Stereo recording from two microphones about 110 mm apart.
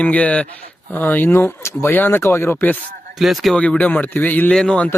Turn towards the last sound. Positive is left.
turn(degrees=5)  # may be behind; listen again after turning